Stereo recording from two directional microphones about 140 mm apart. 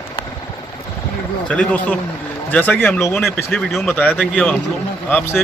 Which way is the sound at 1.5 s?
10° left (ahead or behind).